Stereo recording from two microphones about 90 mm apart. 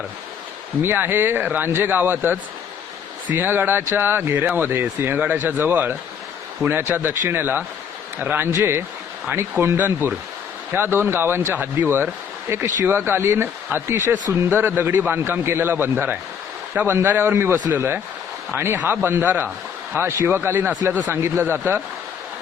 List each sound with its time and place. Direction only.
0.8 s speech: 25° right (ahead or behind)